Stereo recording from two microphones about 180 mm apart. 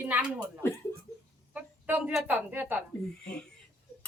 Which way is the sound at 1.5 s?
10° right (ahead or behind).